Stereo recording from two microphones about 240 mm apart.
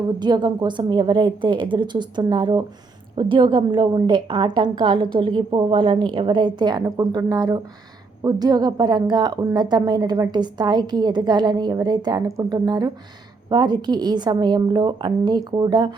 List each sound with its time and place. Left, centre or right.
0.2 s a woman's voice: centre